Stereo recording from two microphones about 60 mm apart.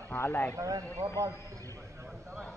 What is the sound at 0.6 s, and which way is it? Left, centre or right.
A man's voice, right.